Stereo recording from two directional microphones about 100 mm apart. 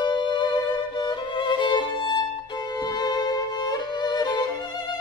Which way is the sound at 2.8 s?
45° left (ahead or behind).